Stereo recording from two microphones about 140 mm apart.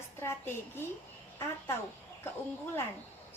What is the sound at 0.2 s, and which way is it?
Speech, 15° left (ahead or behind).